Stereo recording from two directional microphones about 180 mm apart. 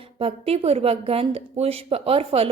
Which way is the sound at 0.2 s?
35° right (ahead or behind).